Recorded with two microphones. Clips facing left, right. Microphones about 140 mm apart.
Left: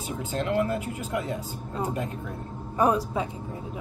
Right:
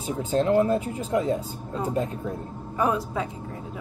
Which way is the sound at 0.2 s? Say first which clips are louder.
Right 6 dB; 35° right (ahead or behind).